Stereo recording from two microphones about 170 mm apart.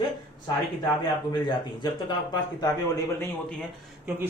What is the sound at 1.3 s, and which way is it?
Speech, 25° left (ahead or behind).